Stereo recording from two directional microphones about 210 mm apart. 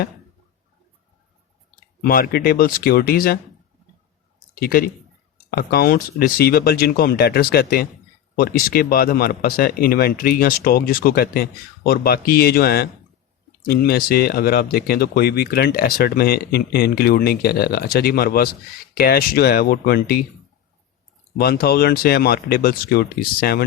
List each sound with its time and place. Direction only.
2.0 s speech: 45° left (ahead or behind)
4.6 s speech: 45° left (ahead or behind)
21.3 s speech: 50° left (ahead or behind)